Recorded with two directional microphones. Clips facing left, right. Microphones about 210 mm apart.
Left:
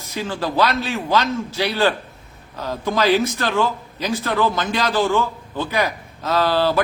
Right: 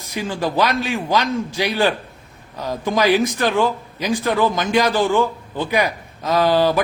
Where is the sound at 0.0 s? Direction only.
15° right (ahead or behind).